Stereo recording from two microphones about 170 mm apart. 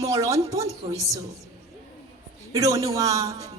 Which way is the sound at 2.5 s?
20° right (ahead or behind).